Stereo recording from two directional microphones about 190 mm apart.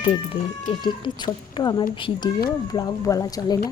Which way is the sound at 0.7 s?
25° left (ahead or behind).